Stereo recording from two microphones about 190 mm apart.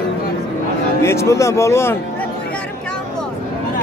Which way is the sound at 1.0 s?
15° left (ahead or behind).